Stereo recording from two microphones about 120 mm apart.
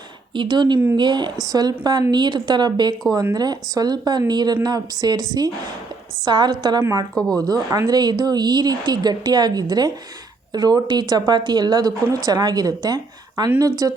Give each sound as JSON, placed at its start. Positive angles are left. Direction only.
{"t": 0.3, "sound": "speech", "side_deg": -40}